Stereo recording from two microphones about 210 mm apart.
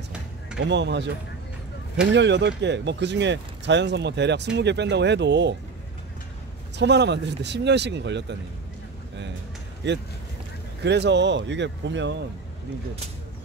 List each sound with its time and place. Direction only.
0.6 s speech: 55° right (ahead or behind)
2.1 s speech: 55° right (ahead or behind)
6.8 s speech: 55° right (ahead or behind)
9.8 s speech: 55° right (ahead or behind)